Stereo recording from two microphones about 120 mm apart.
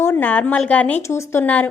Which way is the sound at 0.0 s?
15° left (ahead or behind).